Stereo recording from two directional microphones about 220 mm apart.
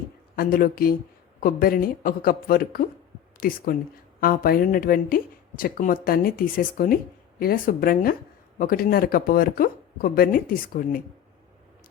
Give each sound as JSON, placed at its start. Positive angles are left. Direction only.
{"t": 0.3, "sound": "speech", "side_deg": 40}